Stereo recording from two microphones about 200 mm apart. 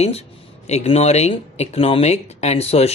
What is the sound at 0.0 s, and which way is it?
Speech, 30° left (ahead or behind).